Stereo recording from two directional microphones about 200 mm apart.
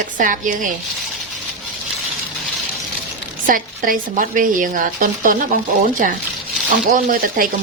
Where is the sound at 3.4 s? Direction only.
45° right (ahead or behind).